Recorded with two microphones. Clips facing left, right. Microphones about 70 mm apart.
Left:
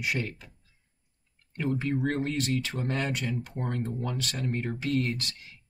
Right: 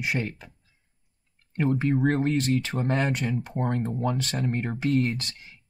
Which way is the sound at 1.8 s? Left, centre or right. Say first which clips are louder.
Right 6 dB; right.